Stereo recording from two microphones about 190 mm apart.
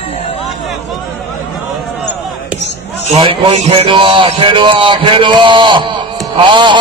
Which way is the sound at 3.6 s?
25° right (ahead or behind).